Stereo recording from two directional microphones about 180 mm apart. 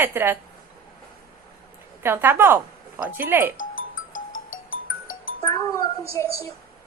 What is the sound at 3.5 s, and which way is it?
Music, 90° left.